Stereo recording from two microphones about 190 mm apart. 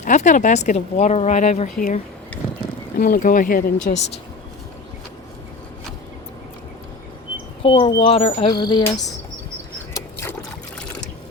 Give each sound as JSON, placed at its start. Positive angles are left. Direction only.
{"t": 0.0, "sound": "speech", "side_deg": 40}
{"t": 3.0, "sound": "speech", "side_deg": 45}
{"t": 7.6, "sound": "speech", "side_deg": 25}